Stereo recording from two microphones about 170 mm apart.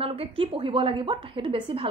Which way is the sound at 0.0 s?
35° right (ahead or behind).